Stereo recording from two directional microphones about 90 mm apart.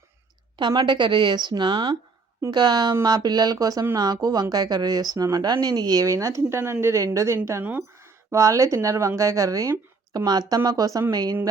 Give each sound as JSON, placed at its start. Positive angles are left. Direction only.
{"t": 0.8, "sound": "a woman's voice", "side_deg": -60}
{"t": 7.6, "sound": "speech", "side_deg": -20}
{"t": 8.3, "sound": "speech", "side_deg": -35}